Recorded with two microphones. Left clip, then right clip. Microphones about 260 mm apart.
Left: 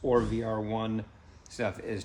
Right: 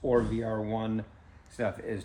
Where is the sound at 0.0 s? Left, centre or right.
Centre.